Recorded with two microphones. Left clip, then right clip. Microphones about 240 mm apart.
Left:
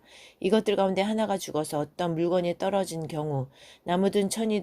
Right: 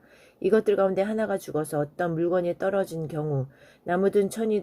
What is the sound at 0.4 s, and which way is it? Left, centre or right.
Speech, left.